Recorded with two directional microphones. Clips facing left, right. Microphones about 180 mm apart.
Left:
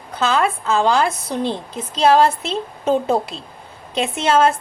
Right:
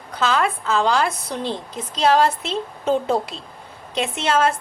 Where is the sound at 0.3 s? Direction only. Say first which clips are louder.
Left 2 dB; 25° left (ahead or behind).